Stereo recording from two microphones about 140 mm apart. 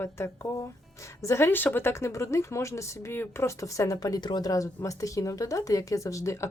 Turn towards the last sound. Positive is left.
turn(degrees=20)  # may be behind; listen again after turning